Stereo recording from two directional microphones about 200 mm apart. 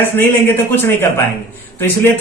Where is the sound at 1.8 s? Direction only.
10° left (ahead or behind).